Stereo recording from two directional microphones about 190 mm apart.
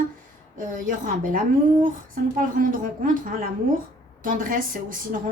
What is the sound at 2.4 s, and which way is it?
A woman's voice, 45° right (ahead or behind).